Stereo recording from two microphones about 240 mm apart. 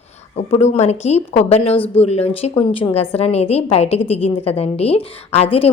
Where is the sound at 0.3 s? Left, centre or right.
Left.